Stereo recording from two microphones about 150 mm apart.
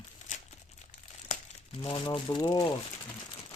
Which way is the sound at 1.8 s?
35° left (ahead or behind).